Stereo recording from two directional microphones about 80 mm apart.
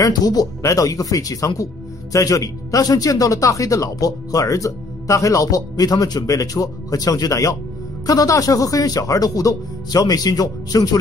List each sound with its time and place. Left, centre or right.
0.0 s speech: left